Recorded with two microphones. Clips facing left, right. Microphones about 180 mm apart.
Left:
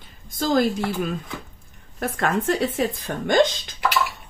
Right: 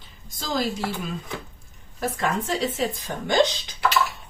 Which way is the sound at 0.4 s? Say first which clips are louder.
Left 6 dB; 55° left (ahead or behind).